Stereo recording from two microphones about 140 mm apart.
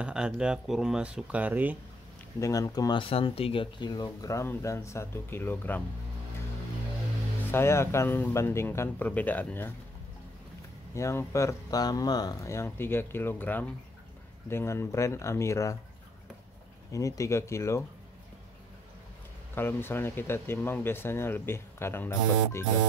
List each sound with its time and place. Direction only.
0.0 s speech: 5° right (ahead or behind)
2.4 s speech: 25° left (ahead or behind)
7.5 s speech: 20° left (ahead or behind)
11.0 s speech: 20° left (ahead or behind)
16.9 s speech: 25° left (ahead or behind)
19.5 s speech: 15° left (ahead or behind)